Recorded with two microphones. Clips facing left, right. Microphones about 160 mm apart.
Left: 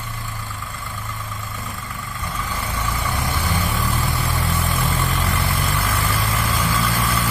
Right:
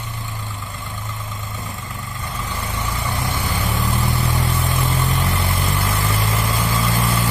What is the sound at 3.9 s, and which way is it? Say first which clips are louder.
Vehicle: right 2 dB; 20° right (ahead or behind).